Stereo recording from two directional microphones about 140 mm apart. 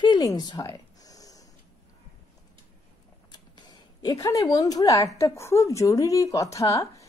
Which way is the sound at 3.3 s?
30° left (ahead or behind).